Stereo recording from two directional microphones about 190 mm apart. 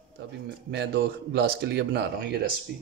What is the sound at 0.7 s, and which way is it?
Speech, 60° right (ahead or behind).